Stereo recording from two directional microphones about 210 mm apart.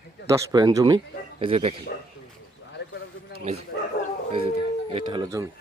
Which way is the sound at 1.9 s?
45° left (ahead or behind).